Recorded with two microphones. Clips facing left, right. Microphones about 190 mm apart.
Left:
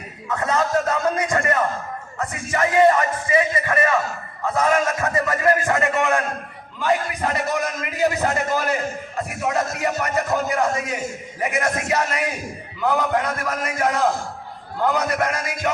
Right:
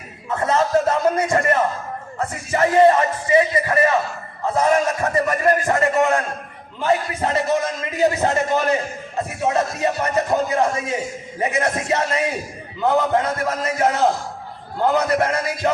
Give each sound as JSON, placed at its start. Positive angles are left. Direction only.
{"t": 0.3, "sound": "a sound", "side_deg": -25}
{"t": 2.1, "sound": "a man's voice", "side_deg": -30}
{"t": 6.7, "sound": "a man's voice", "side_deg": -25}